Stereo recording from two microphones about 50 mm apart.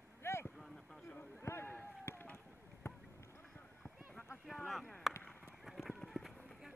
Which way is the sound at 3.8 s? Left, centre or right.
Left.